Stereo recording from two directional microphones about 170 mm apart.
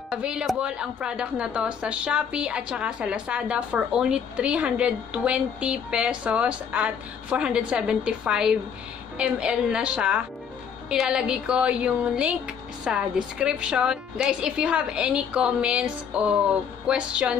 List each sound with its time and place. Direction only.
0.1 s a woman's voice: 5° right (ahead or behind)